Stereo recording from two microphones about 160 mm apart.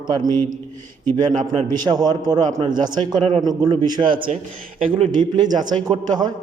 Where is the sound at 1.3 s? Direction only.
45° right (ahead or behind).